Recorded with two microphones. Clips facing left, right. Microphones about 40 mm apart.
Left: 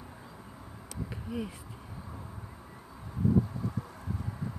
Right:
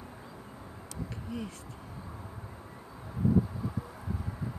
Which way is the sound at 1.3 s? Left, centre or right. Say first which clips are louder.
Left 3 dB; centre.